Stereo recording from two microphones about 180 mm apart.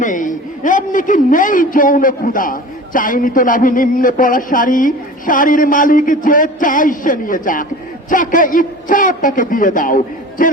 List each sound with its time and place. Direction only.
0.0 s a man's voice: 45° left (ahead or behind)